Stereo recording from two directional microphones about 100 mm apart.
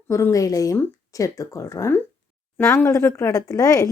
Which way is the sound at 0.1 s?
30° left (ahead or behind).